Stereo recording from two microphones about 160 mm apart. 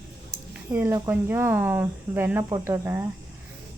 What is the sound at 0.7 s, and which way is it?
Speech, 10° right (ahead or behind).